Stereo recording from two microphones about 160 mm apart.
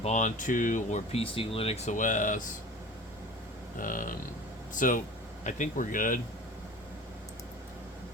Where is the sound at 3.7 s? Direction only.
55° left (ahead or behind).